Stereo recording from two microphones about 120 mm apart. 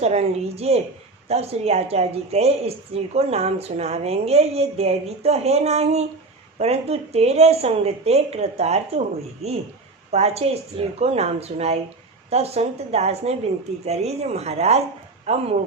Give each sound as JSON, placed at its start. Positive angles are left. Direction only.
{"t": 0.0, "sound": "a woman's voice", "side_deg": -60}